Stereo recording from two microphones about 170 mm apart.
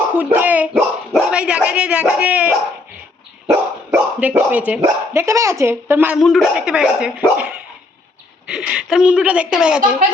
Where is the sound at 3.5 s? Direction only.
10° right (ahead or behind).